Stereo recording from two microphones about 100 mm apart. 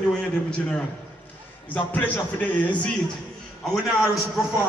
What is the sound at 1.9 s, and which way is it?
Speech, 15° left (ahead or behind).